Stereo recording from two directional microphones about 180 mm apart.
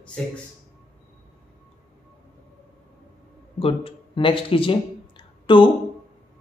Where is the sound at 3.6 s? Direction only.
30° left (ahead or behind).